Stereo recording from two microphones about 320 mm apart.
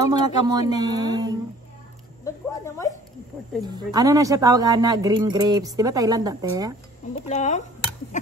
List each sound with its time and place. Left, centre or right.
0.0 s speech: centre
2.2 s speech: centre
3.6 s speech: centre
7.2 s speech: left